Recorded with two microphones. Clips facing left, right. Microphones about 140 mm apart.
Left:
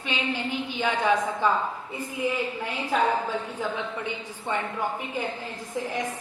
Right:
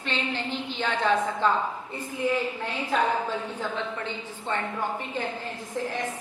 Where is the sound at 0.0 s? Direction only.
10° left (ahead or behind).